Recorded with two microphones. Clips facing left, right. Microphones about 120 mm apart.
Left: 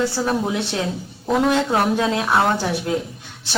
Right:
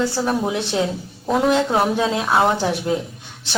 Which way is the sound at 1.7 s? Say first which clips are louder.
Even; 10° right (ahead or behind).